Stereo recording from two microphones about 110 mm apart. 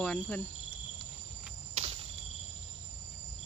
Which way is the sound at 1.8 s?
70° right (ahead or behind).